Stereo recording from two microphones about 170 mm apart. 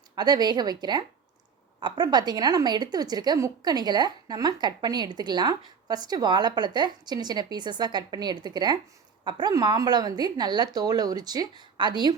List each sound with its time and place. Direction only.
0.2 s a woman's voice: 25° right (ahead or behind)